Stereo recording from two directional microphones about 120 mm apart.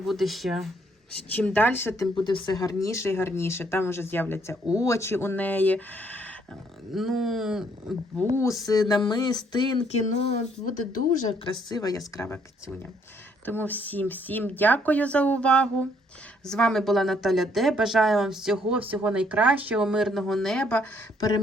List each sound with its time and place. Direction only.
0.0 s speech: centre (ahead or behind)
1.5 s speech: 15° left (ahead or behind)
2.0 s speech: 40° left (ahead or behind); by 6.3 s 15° left (ahead or behind)
6.9 s speech: centre (ahead or behind)
8.6 s a sound: 35° left (ahead or behind)
9.9 s speech: 65° left (ahead or behind)
11.7 s speech: 30° left (ahead or behind); by 20.8 s 5° left (ahead or behind)
21.2 s a sound: 30° left (ahead or behind)